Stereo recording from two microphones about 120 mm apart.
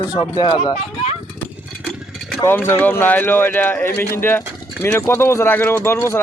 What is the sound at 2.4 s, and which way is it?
Speech, 20° left (ahead or behind).